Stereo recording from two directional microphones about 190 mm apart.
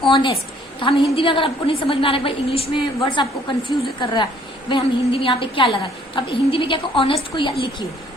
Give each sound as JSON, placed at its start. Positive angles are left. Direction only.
{"t": 0.0, "sound": "a woman's voice", "side_deg": 25}